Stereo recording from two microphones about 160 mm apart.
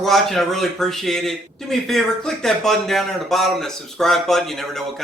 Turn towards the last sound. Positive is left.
turn(degrees=0)  # may be behind; listen again after turning